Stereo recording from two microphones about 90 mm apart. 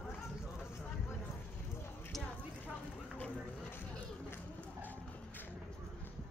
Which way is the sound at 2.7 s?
20° left (ahead or behind).